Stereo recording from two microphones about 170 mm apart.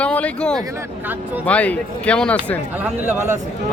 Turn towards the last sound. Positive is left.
turn(degrees=-15)  # may be behind; listen again after turning